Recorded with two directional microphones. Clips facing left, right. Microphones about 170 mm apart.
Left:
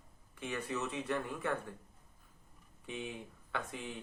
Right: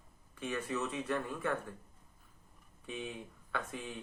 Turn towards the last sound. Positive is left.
turn(degrees=20)  # may be behind; listen again after turning